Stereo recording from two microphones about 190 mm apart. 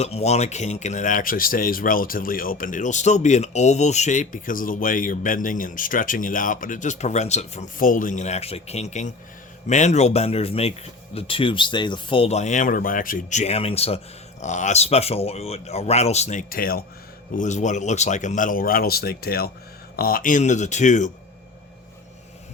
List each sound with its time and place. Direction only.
0.0 s speech: 35° left (ahead or behind); by 16.8 s 50° left (ahead or behind)
17.3 s speech: 40° left (ahead or behind)